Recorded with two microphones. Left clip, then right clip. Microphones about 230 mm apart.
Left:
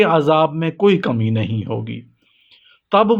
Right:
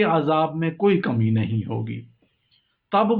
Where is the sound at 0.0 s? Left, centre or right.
Left.